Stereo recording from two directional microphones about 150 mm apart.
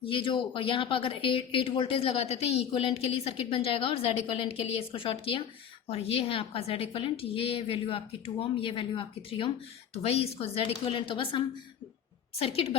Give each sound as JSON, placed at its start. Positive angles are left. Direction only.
{"t": 0.0, "sound": "a woman's voice", "side_deg": 35}